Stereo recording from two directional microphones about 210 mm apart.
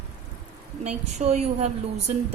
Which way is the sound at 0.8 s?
30° right (ahead or behind).